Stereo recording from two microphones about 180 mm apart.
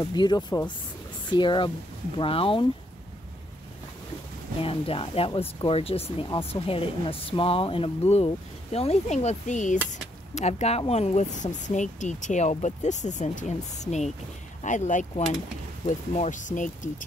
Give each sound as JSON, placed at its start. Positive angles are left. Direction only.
{"t": 0.0, "sound": "speech", "side_deg": 25}
{"t": 4.6, "sound": "speech", "side_deg": 30}